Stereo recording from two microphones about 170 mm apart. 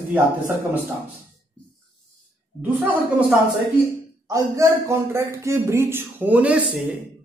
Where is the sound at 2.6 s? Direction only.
10° right (ahead or behind).